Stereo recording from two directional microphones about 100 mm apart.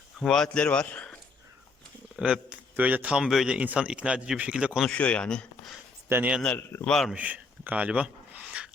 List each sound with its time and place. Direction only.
0.3 s speech: 5° left (ahead or behind)
2.1 s speech: 10° right (ahead or behind)
4.8 s speech: 10° left (ahead or behind)
6.1 s speech: 20° right (ahead or behind)
6.8 s a man's voice: 5° left (ahead or behind)
7.2 s a sound: 15° right (ahead or behind)